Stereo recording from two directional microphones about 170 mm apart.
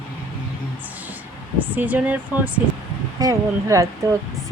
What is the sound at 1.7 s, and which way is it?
Speech, 10° right (ahead or behind).